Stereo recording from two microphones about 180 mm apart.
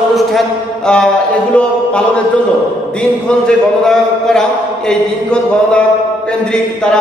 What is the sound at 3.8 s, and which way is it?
A man's voice, 5° left (ahead or behind).